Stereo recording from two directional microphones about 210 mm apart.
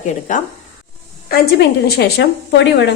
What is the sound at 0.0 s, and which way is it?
Speech, 35° left (ahead or behind).